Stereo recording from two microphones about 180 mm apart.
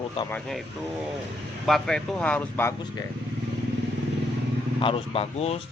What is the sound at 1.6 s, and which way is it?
Speech, centre (ahead or behind).